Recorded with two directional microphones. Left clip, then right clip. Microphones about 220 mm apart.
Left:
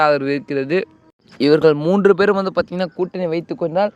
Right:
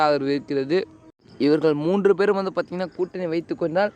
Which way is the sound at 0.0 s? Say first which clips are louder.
Left 5 dB; 20° left (ahead or behind).